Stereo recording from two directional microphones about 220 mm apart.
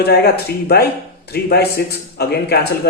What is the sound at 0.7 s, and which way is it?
A man's voice, 45° left (ahead or behind).